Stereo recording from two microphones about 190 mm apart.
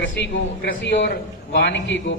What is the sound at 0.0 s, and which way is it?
A man's voice, 65° left (ahead or behind).